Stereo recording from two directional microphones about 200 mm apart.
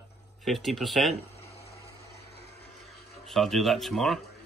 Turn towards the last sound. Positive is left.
turn(degrees=0)  # may be behind; listen again after turning